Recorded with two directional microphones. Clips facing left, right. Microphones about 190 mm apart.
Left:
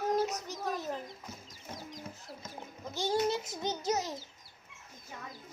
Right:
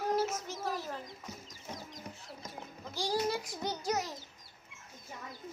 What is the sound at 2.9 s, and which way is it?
Child singing, 25° left (ahead or behind).